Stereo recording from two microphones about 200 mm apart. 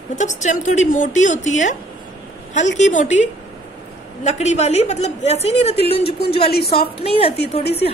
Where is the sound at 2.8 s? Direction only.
40° left (ahead or behind).